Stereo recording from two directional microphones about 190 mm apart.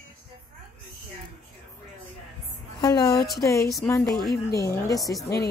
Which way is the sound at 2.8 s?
20° left (ahead or behind).